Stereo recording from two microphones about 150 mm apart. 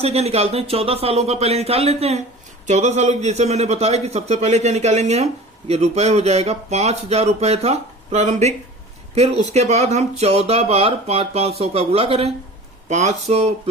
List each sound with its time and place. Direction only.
0.0 s a man's voice: 45° right (ahead or behind)